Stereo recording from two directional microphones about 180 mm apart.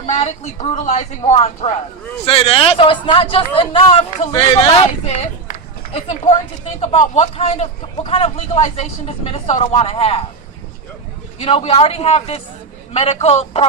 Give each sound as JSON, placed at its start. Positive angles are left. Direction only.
{"t": 0.0, "sound": "speech", "side_deg": 40}
{"t": 11.3, "sound": "speech", "side_deg": 35}